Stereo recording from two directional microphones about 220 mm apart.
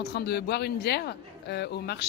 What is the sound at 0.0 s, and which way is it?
A woman's voice, 45° left (ahead or behind).